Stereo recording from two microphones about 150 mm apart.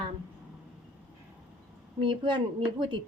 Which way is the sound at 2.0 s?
35° right (ahead or behind).